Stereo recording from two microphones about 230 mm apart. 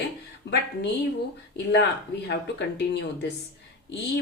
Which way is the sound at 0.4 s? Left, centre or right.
Left.